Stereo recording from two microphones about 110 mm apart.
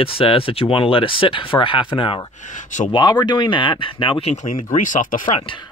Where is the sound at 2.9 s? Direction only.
40° left (ahead or behind).